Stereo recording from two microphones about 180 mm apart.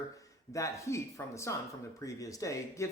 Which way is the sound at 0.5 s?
15° left (ahead or behind).